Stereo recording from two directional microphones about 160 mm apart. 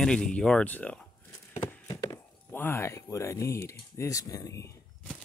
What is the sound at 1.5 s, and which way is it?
Horse, 15° left (ahead or behind).